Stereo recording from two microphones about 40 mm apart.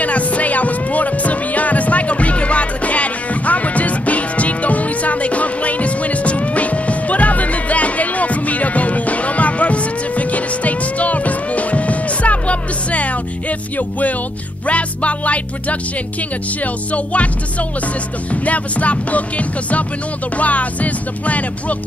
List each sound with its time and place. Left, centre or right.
0.0 s music: left
16.9 s music: left